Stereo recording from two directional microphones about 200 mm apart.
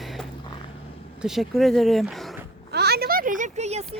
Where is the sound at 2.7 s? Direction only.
50° right (ahead or behind); by 3.8 s 35° right (ahead or behind).